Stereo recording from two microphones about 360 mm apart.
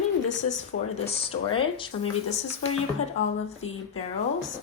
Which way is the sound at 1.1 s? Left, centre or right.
Centre.